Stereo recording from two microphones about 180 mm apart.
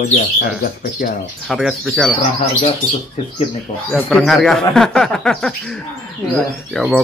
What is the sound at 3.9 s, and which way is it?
Speech, 5° left (ahead or behind).